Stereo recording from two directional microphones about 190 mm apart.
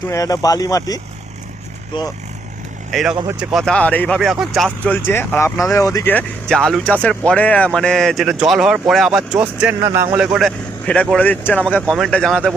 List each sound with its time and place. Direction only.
0.1 s speech: 20° left (ahead or behind)
2.9 s speech: centre (ahead or behind)
5.7 s speech: 15° left (ahead or behind); by 10.3 s 15° right (ahead or behind)
10.3 s speech: 5° left (ahead or behind)